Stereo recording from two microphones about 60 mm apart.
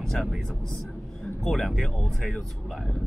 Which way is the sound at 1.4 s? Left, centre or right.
Centre.